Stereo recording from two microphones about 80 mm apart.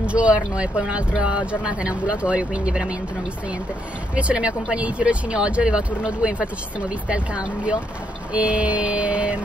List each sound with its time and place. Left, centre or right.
0.0 s speech: centre
4.1 s speech: centre